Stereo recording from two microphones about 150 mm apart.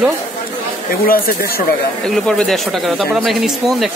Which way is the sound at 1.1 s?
75° left (ahead or behind).